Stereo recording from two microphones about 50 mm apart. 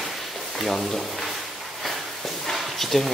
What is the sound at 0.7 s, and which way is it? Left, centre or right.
Speech, centre.